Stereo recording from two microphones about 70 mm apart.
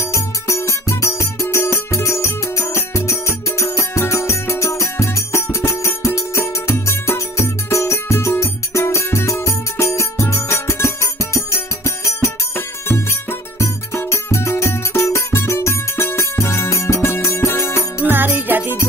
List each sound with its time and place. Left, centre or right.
0.0 s music: left
12.5 s music: left
18.1 s music: right